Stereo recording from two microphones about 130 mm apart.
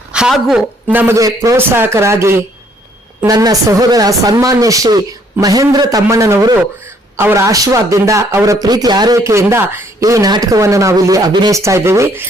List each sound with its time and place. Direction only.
0.1 s a man's voice: 5° right (ahead or behind); by 12.2 s 20° right (ahead or behind)